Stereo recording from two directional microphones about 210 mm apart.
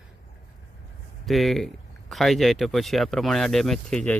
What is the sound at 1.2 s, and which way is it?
Speech, centre (ahead or behind).